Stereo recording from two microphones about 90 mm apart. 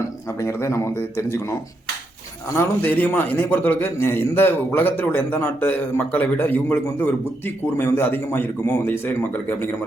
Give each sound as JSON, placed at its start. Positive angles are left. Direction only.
{"t": 0.3, "sound": "a man's voice", "side_deg": 30}